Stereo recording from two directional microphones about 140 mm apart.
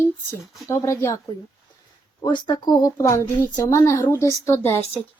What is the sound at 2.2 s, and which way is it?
Speech, 30° left (ahead or behind).